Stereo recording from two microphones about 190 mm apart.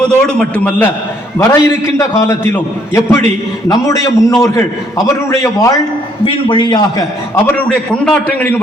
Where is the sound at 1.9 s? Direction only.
15° left (ahead or behind).